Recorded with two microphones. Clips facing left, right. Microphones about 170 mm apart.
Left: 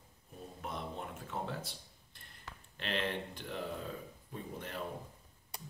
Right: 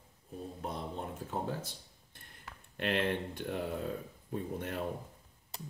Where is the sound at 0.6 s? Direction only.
35° right (ahead or behind).